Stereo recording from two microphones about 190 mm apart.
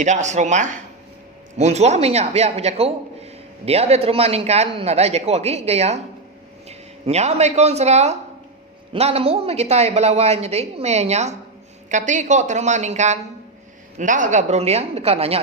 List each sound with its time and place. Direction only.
0.0 s speech: 40° right (ahead or behind)